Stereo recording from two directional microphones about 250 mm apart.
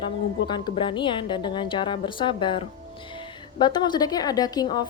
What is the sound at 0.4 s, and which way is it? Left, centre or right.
A woman's voice, centre.